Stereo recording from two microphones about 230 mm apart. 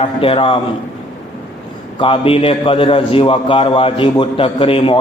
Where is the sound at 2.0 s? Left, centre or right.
Left.